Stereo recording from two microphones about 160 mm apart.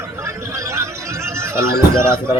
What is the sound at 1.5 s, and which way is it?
Speech, 15° right (ahead or behind).